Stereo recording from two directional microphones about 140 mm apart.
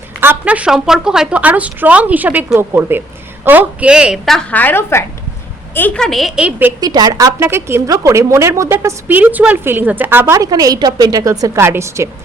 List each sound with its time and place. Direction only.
0.2 s a woman's voice: 15° right (ahead or behind)
6.7 s a woman's voice: 30° right (ahead or behind)